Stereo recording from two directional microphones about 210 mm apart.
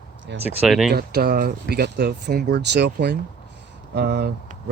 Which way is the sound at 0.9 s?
45° right (ahead or behind).